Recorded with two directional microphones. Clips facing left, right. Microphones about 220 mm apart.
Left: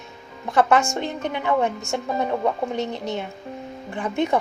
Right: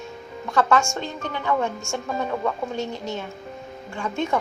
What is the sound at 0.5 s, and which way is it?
A woman's voice, 20° left (ahead or behind).